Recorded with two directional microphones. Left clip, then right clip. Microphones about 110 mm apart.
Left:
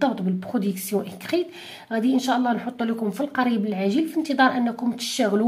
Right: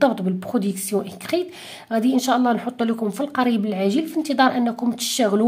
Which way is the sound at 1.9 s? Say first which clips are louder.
Right 3 dB; 40° right (ahead or behind).